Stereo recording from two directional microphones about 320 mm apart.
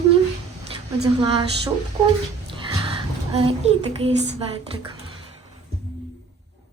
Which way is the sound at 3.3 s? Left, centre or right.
Centre.